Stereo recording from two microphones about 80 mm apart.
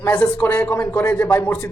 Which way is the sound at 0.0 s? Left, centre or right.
Left.